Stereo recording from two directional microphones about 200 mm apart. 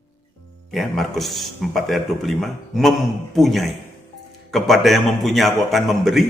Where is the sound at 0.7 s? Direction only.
Centre (ahead or behind).